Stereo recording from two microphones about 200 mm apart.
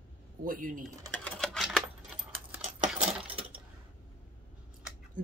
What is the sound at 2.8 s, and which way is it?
Coin, 30° right (ahead or behind).